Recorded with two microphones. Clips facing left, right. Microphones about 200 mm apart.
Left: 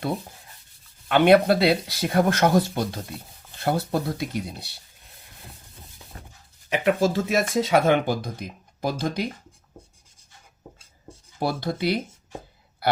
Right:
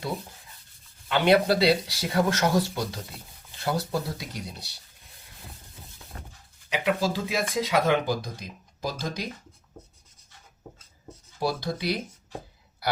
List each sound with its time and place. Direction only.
1.0 s speech: 55° left (ahead or behind)
6.8 s speech: 50° left (ahead or behind)
11.3 s speech: 55° left (ahead or behind)